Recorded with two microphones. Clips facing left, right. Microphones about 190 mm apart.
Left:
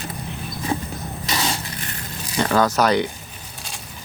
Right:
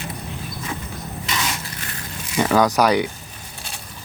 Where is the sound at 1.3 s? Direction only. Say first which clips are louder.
Left 2 dB; 30° left (ahead or behind).